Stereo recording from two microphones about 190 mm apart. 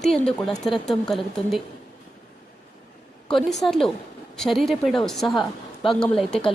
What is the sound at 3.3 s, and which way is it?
Speech, centre (ahead or behind).